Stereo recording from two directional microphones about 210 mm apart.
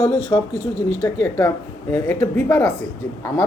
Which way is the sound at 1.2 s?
5° left (ahead or behind).